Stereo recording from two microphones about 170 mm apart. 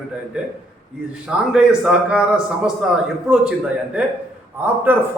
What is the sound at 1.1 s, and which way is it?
A man's voice, 5° right (ahead or behind).